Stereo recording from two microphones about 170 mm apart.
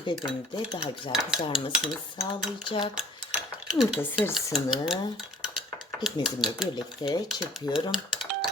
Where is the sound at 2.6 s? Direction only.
30° left (ahead or behind).